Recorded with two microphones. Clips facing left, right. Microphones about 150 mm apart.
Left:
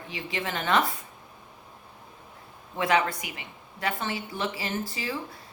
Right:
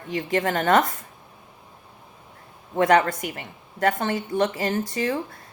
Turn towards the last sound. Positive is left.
turn(degrees=-45)  # may be behind; listen again after turning